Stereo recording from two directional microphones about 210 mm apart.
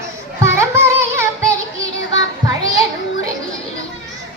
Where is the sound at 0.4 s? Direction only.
10° right (ahead or behind).